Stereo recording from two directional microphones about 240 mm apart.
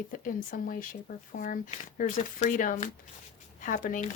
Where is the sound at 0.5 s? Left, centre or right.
Left.